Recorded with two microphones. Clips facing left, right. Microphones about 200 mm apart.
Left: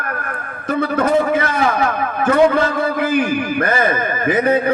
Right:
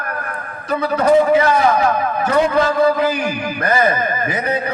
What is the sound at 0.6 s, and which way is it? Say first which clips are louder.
A man's voice: right 1 dB; 50° left (ahead or behind).